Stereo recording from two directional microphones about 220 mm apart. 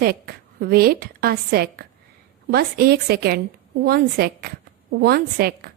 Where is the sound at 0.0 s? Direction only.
45° right (ahead or behind).